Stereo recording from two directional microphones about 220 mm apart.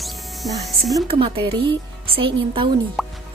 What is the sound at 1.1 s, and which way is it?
A woman's voice, 25° right (ahead or behind).